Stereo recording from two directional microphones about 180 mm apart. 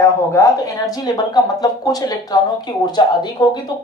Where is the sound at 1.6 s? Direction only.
20° left (ahead or behind).